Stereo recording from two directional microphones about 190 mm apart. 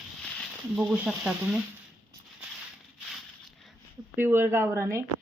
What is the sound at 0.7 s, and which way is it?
Speech, 5° right (ahead or behind).